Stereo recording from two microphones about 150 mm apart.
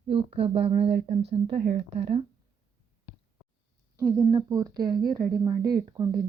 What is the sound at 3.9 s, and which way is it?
Speech, 20° right (ahead or behind).